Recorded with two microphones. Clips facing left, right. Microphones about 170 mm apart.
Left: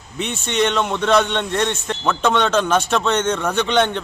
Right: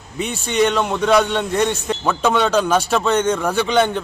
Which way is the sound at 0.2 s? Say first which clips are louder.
Right 2 dB; 5° right (ahead or behind).